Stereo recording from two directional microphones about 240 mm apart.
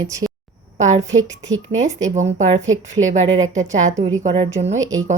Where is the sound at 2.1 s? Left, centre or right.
Right.